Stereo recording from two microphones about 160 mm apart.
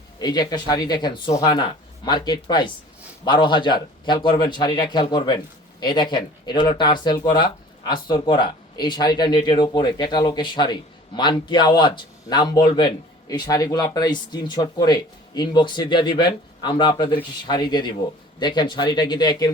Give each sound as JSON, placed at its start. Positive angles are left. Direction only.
{"t": 0.2, "sound": "speech", "side_deg": 25}